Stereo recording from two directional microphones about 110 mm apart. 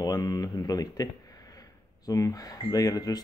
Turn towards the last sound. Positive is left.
turn(degrees=35)  # may be behind; listen again after turning